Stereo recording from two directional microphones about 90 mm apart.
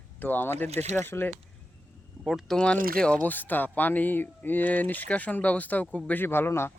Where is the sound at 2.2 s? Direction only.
Centre (ahead or behind).